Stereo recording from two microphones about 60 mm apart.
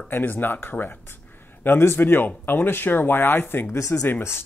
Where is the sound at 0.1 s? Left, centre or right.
Left.